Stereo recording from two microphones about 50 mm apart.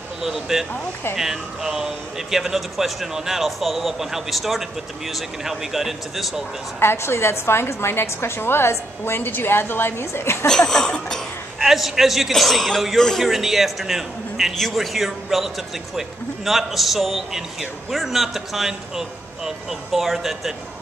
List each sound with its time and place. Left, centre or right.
0.2 s speech: centre
6.8 s a woman's voice: left
10.4 s a sound: centre
11.6 s speech: centre
13.2 s speech: centre